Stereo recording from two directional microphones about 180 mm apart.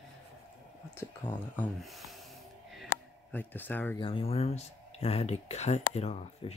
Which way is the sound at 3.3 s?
10° left (ahead or behind).